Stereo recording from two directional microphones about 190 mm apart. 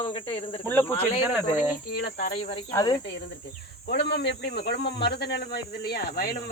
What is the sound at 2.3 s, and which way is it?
Speech, 30° left (ahead or behind).